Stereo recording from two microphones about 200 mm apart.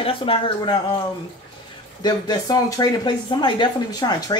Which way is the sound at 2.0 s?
20° left (ahead or behind).